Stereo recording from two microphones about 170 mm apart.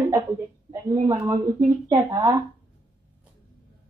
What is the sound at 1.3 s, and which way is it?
Speech, 40° right (ahead or behind).